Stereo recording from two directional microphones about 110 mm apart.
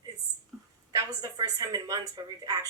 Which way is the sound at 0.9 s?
30° right (ahead or behind).